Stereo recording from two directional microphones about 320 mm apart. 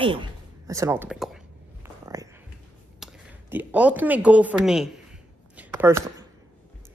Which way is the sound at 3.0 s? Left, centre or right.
Centre.